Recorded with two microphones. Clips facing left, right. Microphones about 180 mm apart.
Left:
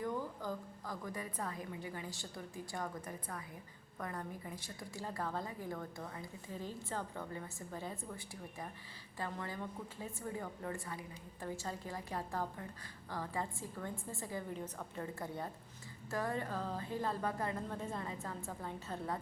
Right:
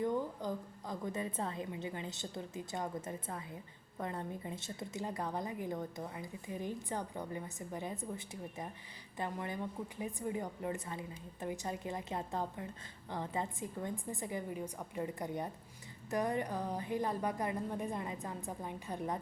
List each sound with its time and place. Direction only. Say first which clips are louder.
0.0 s a woman's voice: right 4 dB; 20° right (ahead or behind)